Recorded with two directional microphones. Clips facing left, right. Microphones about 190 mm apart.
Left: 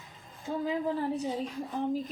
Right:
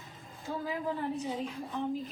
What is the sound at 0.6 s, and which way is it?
Speech, 35° left (ahead or behind).